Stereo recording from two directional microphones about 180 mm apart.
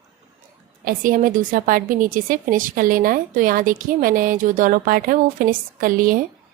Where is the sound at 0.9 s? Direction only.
50° right (ahead or behind).